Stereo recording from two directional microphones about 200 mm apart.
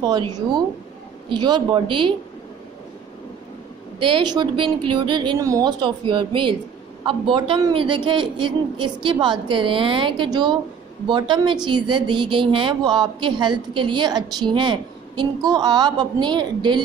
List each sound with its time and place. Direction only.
0.0 s a woman's voice: 20° right (ahead or behind)
1.3 s a woman's voice: 20° right (ahead or behind)
4.0 s a woman's voice: 25° right (ahead or behind)